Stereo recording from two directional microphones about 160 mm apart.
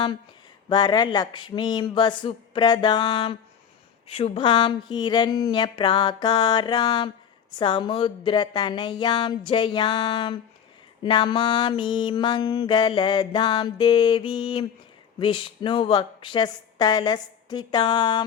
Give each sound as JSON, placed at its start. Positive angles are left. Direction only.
{"t": 0.7, "sound": "speech", "side_deg": 25}
{"t": 7.6, "sound": "mantra", "side_deg": 30}
{"t": 15.2, "sound": "speech", "side_deg": 30}